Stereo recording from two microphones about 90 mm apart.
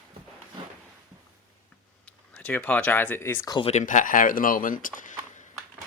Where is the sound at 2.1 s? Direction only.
15° left (ahead or behind).